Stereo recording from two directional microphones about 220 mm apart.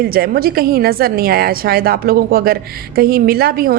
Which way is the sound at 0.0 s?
45° right (ahead or behind).